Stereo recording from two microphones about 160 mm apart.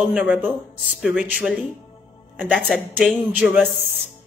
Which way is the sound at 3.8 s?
Centre (ahead or behind).